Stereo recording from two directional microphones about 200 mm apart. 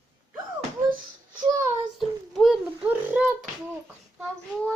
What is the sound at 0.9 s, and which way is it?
Speech, 25° right (ahead or behind).